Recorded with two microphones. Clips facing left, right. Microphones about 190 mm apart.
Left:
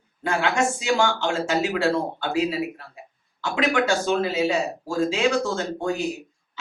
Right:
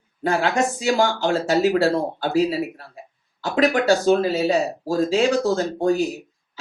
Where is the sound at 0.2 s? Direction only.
40° right (ahead or behind).